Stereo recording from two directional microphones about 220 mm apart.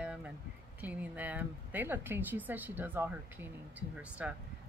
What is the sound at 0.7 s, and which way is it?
Speech, 5° right (ahead or behind).